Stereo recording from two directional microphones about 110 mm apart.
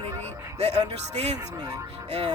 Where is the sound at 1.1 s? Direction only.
75° right (ahead or behind).